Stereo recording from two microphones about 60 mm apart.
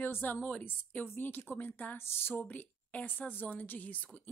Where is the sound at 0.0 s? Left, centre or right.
Left.